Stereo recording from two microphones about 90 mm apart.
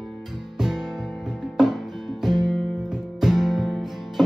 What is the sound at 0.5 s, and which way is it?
Music, 5° right (ahead or behind).